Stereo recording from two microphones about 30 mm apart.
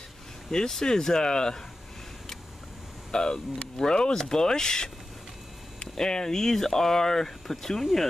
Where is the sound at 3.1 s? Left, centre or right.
Left; by 7.8 s centre.